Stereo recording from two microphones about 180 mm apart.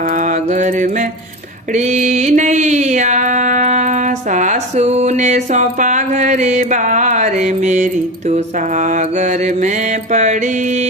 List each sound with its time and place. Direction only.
0.5 s mantra: 45° right (ahead or behind)
10.1 s music: 40° right (ahead or behind)